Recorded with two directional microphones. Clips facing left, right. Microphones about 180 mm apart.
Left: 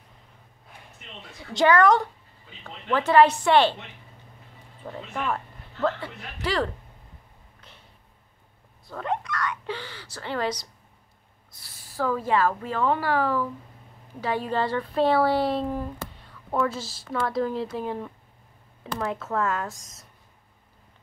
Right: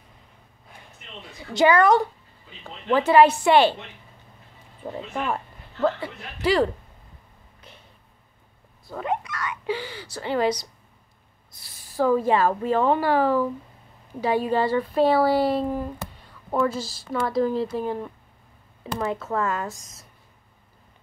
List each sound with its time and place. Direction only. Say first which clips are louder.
1.4 s speech: right 1 dB; 5° right (ahead or behind)
4.8 s speech: right 2 dB; 20° right (ahead or behind)
7.6 s a sound: right 4 dB; 10° right (ahead or behind)
8.8 s speech: right 2 dB; 5° right (ahead or behind)